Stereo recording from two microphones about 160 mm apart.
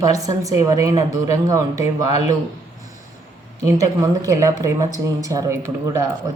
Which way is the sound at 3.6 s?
20° right (ahead or behind).